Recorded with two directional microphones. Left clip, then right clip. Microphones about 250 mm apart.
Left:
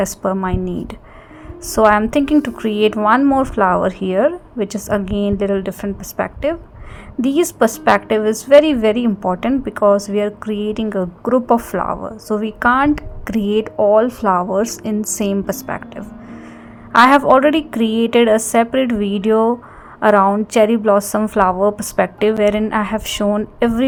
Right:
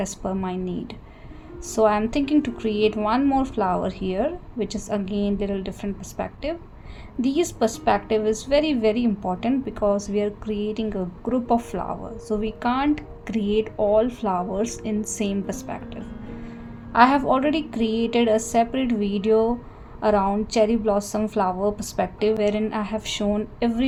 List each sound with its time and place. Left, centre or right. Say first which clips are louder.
0.2 s a woman's voice: left 9 dB; left
1.6 s a woman's voice: left 8 dB; left